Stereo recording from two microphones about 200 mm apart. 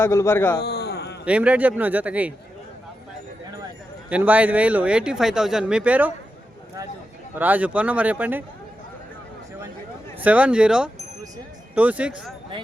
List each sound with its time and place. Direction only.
0.0 s a man's voice: 15° left (ahead or behind)
0.6 s a sound: 55° left (ahead or behind)
1.2 s speech: 5° right (ahead or behind)
4.1 s speech: 10° right (ahead or behind)
7.3 s speech: 10° right (ahead or behind)
10.2 s speech: 5° right (ahead or behind)